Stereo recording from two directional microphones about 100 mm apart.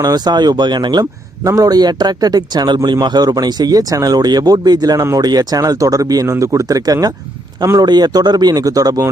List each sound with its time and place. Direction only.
0.0 s a man's voice: 45° right (ahead or behind)